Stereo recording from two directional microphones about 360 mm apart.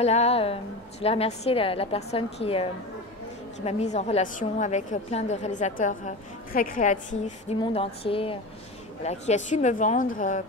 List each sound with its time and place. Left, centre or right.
0.0 s a woman's voice: centre